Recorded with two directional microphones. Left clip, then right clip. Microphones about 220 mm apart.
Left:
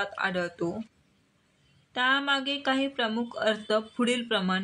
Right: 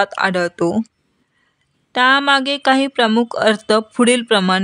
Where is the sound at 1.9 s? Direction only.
50° right (ahead or behind).